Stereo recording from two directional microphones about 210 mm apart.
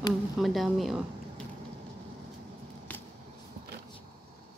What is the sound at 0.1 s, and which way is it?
Speech, centre (ahead or behind).